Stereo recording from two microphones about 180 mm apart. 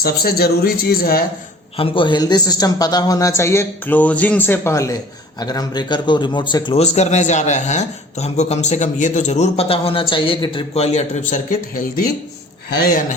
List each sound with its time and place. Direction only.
0.0 s speech: 55° left (ahead or behind)
1.7 s a man's voice: 30° left (ahead or behind)
6.8 s a man's voice: 40° left (ahead or behind)